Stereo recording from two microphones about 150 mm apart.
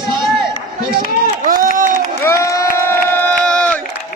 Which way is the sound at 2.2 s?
20° left (ahead or behind).